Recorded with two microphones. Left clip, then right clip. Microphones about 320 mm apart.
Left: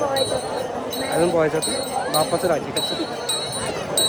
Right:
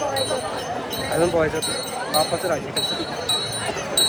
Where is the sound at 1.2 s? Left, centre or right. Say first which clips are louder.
Left 1 dB; centre.